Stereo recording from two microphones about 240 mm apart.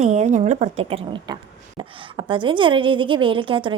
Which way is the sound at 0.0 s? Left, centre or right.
Right.